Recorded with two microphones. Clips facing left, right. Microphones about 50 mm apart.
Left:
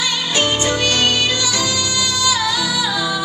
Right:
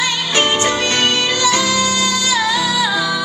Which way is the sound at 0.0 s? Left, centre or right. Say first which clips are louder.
Right 2 dB; right.